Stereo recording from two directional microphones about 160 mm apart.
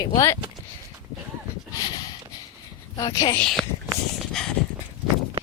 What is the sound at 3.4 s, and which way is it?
Speech, centre (ahead or behind).